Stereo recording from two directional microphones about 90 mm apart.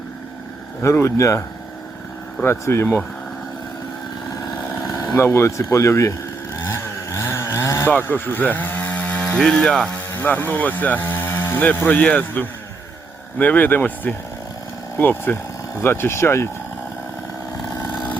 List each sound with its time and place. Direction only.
0.8 s speech: 30° left (ahead or behind)
4.8 s vehicle: 40° left (ahead or behind)
5.1 s speech: 30° left (ahead or behind)
6.7 s chainsaw: 30° left (ahead or behind)
7.9 s speech: 20° left (ahead or behind)
9.5 s speech: 5° left (ahead or behind)
10.2 s speech: 20° left (ahead or behind)